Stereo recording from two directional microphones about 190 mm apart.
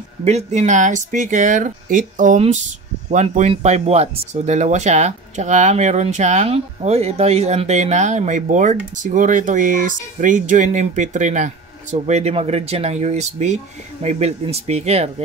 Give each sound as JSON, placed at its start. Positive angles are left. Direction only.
{"t": 0.2, "sound": "speech", "side_deg": -35}